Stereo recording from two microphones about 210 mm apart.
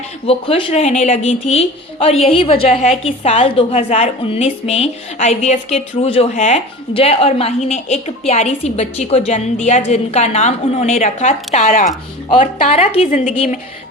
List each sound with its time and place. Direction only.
0.3 s a woman's voice: 25° left (ahead or behind)